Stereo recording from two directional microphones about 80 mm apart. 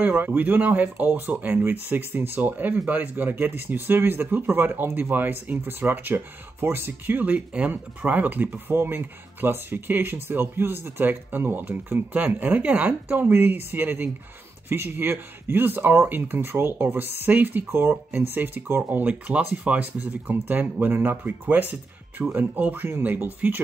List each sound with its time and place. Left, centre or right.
0.0 s speech: right